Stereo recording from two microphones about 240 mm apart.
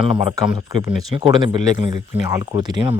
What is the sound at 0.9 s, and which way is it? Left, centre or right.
Speech, centre.